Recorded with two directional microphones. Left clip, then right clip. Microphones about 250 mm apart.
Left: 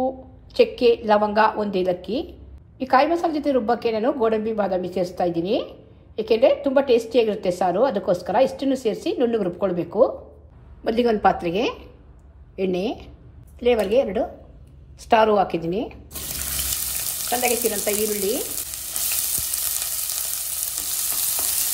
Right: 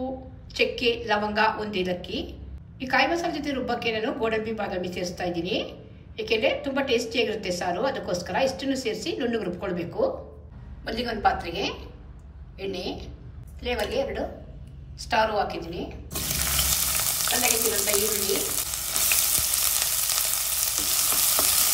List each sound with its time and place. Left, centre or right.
0.5 s a woman's voice: centre
10.8 s a woman's voice: left
16.1 s frying: centre